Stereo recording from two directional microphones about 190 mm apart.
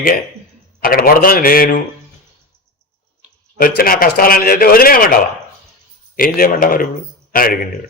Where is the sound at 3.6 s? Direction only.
50° left (ahead or behind).